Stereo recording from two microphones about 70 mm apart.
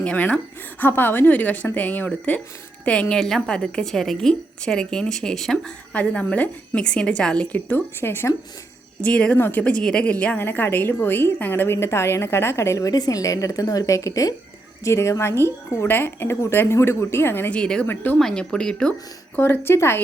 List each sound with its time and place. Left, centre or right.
0.0 s a woman's voice: centre
0.8 s a woman's voice: left
3.2 s a woman's voice: centre; by 8.3 s left
9.0 s a woman's voice: centre
10.4 s a woman's voice: left
12.9 s a woman's voice: left
17.5 s a woman's voice: centre
18.2 s a woman's voice: centre
19.4 s a woman's voice: left